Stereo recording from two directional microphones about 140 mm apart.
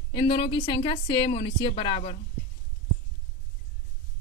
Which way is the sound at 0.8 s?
35° left (ahead or behind).